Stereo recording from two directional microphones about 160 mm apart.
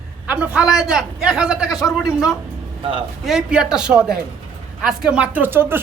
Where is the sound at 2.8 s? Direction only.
35° right (ahead or behind).